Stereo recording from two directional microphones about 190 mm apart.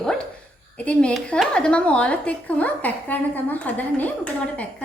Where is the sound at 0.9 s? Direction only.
5° left (ahead or behind).